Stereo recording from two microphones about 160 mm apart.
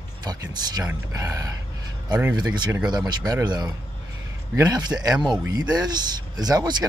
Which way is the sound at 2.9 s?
25° right (ahead or behind).